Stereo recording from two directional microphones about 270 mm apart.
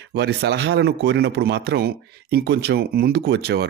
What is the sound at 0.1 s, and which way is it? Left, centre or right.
Speech, right.